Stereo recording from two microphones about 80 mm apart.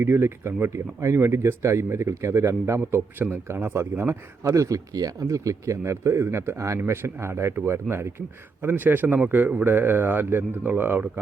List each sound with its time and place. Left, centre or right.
0.0 s a man's voice: right